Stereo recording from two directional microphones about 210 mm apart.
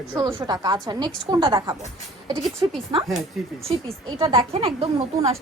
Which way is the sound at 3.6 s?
25° right (ahead or behind).